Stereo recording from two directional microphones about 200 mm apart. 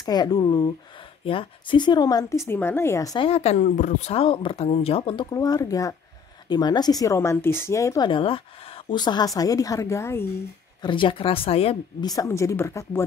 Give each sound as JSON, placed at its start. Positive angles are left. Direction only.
{"t": 0.0, "sound": "speech", "side_deg": 20}
{"t": 3.3, "sound": "speech", "side_deg": 30}
{"t": 10.8, "sound": "speech", "side_deg": 25}